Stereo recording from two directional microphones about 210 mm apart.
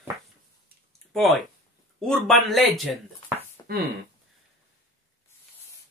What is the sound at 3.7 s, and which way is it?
Speech, 45° right (ahead or behind).